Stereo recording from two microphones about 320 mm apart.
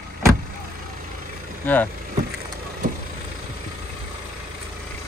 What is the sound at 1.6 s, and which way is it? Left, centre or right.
Speech, centre.